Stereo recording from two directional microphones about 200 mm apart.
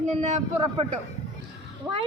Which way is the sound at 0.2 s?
35° right (ahead or behind).